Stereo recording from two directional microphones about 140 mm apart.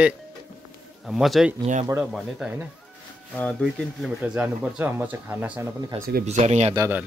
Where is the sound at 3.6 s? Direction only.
5° right (ahead or behind).